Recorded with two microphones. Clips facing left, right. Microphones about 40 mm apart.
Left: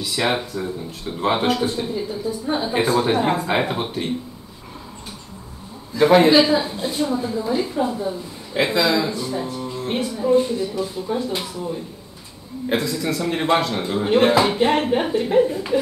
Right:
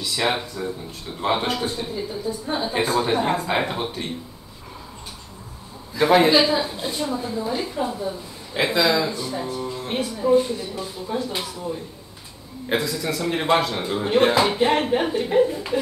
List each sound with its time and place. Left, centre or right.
0.0 s speech: centre
5.9 s speech: centre